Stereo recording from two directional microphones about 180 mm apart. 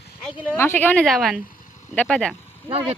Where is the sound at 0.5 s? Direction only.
15° left (ahead or behind).